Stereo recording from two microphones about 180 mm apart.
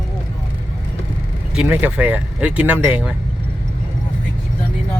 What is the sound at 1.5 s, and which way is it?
Speech, 10° right (ahead or behind).